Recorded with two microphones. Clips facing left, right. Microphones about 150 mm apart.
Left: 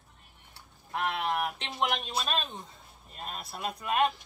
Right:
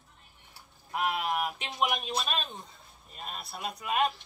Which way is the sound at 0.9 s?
10° right (ahead or behind).